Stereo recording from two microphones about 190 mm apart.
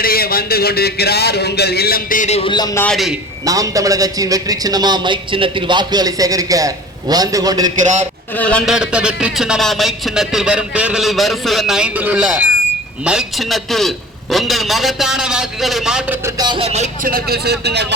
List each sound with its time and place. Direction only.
0.0 s speech: 55° left (ahead or behind); by 2.6 s 25° left (ahead or behind)
2.7 s a man's voice: 5° left (ahead or behind)
3.4 s a man's voice: 20° right (ahead or behind)
8.4 s a man's voice: 5° left (ahead or behind)
16.2 s speech: 20° right (ahead or behind); by 17.8 s 60° right (ahead or behind)